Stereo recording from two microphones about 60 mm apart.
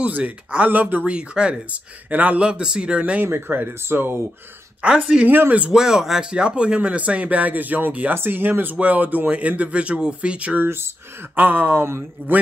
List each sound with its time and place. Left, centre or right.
0.0 s speech: right
3.2 s speech: right
4.8 s speech: centre
8.1 s speech: right; by 10.6 s centre
10.6 s speech: right